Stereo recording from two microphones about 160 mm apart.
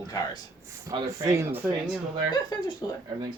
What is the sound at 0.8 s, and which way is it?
Speech, 20° right (ahead or behind).